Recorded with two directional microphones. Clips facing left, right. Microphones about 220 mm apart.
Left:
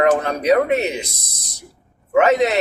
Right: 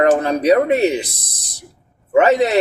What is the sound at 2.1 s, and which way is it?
Speech, 30° right (ahead or behind).